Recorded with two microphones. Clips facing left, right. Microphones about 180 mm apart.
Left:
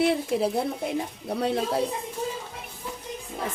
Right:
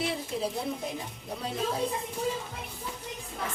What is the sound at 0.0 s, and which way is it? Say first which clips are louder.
Speech: left 8 dB; 60° left (ahead or behind).